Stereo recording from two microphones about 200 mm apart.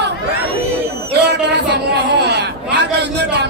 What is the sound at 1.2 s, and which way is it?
Music, 55° right (ahead or behind).